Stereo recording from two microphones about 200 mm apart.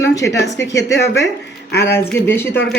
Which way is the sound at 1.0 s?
60° left (ahead or behind).